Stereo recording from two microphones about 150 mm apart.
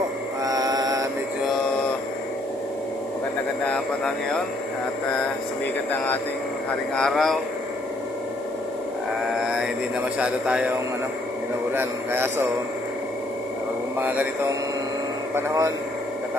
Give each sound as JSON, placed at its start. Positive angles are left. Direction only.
{"t": 0.4, "sound": "mantra", "side_deg": -25}
{"t": 3.6, "sound": "speech", "side_deg": 5}
{"t": 7.0, "sound": "speech", "side_deg": 0}
{"t": 10.1, "sound": "a man's voice", "side_deg": -5}
{"t": 11.7, "sound": "a man's voice", "side_deg": -15}
{"t": 13.9, "sound": "a man's voice", "side_deg": -10}
{"t": 15.3, "sound": "speech", "side_deg": -20}